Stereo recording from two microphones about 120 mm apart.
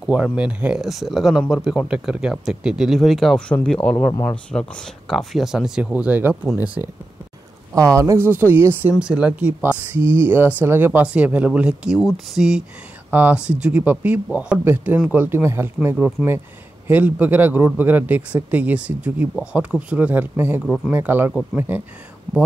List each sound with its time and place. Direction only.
0.0 s speech: 10° right (ahead or behind); by 8.3 s 25° right (ahead or behind)
8.3 s speech: 15° right (ahead or behind)
8.9 s speech: 5° right (ahead or behind)
20.6 s speech: 5° left (ahead or behind)
20.9 s speech: 15° right (ahead or behind)